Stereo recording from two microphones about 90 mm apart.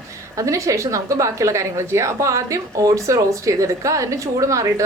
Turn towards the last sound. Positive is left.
turn(degrees=-35)  # may be behind; listen again after turning